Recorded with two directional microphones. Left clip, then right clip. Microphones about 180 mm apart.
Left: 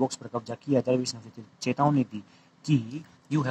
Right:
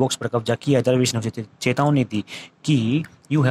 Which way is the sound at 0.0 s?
35° right (ahead or behind).